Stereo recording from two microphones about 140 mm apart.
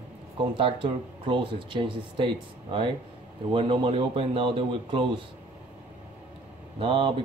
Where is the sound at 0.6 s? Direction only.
35° right (ahead or behind).